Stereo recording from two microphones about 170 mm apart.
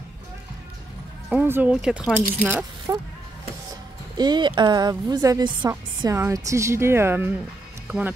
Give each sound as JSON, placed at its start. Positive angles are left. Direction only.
{"t": 1.3, "sound": "speech", "side_deg": -10}
{"t": 2.9, "sound": "a woman's voice", "side_deg": -20}
{"t": 4.2, "sound": "a woman's voice", "side_deg": -25}